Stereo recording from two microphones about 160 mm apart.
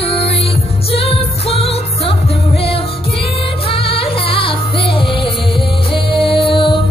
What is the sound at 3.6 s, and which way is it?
Music, 35° left (ahead or behind).